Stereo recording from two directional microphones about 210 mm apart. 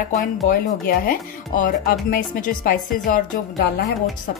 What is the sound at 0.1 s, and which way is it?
Speech, 45° left (ahead or behind).